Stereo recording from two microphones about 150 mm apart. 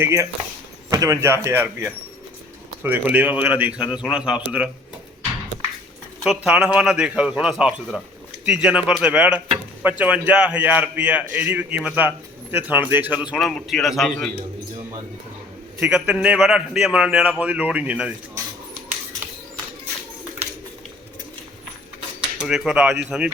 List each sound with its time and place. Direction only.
0.0 s a man's voice: 15° right (ahead or behind)
2.8 s a man's voice: 10° right (ahead or behind)
6.2 s a man's voice: 5° right (ahead or behind)
13.3 s a man's voice: centre (ahead or behind)
15.8 s a man's voice: 10° right (ahead or behind)
22.4 s a man's voice: 5° right (ahead or behind)